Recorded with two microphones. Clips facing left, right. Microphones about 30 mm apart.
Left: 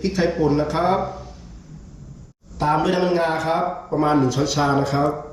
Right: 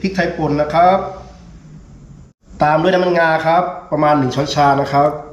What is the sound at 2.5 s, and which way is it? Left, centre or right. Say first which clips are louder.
A man's voice: right 7 dB; right.